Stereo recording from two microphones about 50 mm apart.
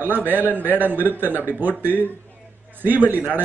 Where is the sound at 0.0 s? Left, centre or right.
Right.